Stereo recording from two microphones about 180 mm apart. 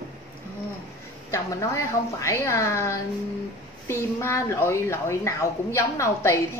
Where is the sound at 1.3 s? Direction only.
15° left (ahead or behind).